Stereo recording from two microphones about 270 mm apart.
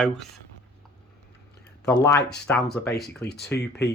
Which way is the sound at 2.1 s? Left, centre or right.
Left.